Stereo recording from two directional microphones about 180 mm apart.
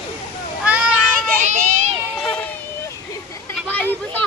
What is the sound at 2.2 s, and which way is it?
Run, 5° left (ahead or behind).